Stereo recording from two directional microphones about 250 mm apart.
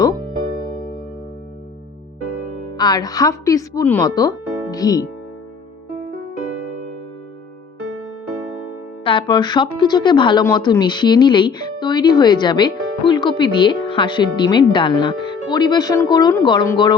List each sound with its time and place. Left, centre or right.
2.7 s speech: centre
9.0 s speech: centre